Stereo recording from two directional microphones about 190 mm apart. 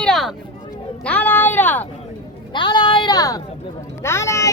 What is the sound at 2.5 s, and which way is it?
Speech, 25° left (ahead or behind).